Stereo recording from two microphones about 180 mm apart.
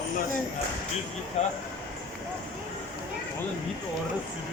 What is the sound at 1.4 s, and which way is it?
Speech, 40° left (ahead or behind).